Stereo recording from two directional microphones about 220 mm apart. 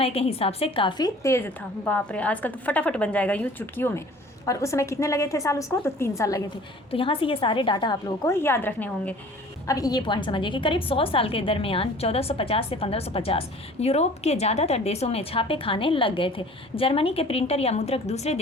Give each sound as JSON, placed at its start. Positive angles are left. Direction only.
{"t": 0.0, "sound": "a woman's voice", "side_deg": 25}
{"t": 6.9, "sound": "a woman's voice", "side_deg": 25}